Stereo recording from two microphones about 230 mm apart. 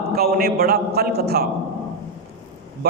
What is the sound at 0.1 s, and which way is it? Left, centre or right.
A man's voice, right.